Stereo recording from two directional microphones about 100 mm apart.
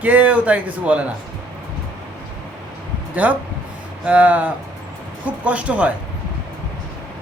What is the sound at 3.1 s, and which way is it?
Speech, 15° right (ahead or behind).